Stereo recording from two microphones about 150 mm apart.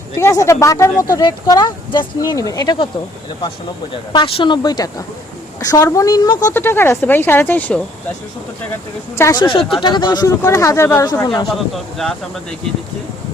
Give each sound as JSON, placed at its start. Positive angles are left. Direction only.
{"t": 0.2, "sound": "speech", "side_deg": 20}
{"t": 6.5, "sound": "speech", "side_deg": 15}
{"t": 9.1, "sound": "speech", "side_deg": 20}
{"t": 9.4, "sound": "speech", "side_deg": 35}
{"t": 11.4, "sound": "speech", "side_deg": 0}